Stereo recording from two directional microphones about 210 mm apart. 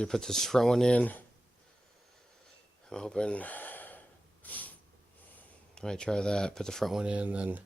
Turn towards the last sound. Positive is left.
turn(degrees=-5)  # may be behind; listen again after turning